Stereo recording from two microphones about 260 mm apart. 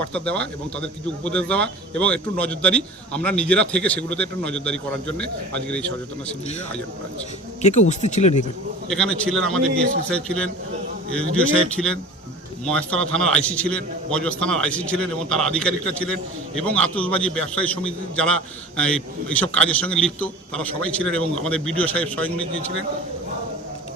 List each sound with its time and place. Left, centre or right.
0.0 s a man's voice: centre
7.6 s speech: left
8.9 s a man's voice: centre